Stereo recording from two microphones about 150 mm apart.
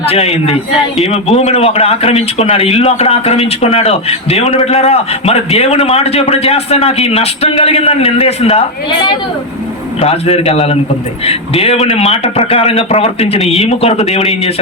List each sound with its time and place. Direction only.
0.0 s a man's voice: 45° left (ahead or behind)
10.0 s a man's voice: 40° left (ahead or behind)